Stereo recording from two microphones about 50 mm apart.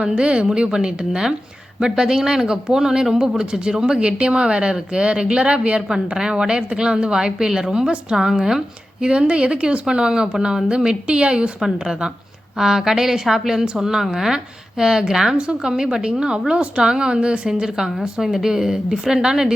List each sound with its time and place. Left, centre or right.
0.0 s speech: centre